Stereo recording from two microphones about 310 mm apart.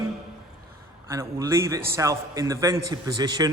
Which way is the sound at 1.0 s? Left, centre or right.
Centre.